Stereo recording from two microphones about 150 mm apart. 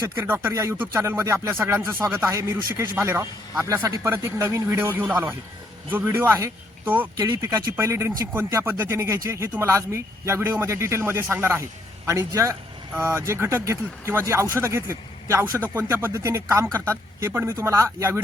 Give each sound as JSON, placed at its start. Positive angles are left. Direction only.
{"t": 0.2, "sound": "speech", "side_deg": -15}
{"t": 7.2, "sound": "a man's voice", "side_deg": -25}